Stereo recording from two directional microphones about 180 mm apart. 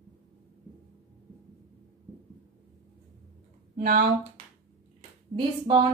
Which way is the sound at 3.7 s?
50° right (ahead or behind).